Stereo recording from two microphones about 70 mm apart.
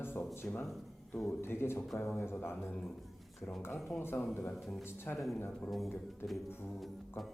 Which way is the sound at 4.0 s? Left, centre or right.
Left.